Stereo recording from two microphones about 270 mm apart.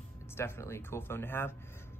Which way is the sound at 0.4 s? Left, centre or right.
Centre.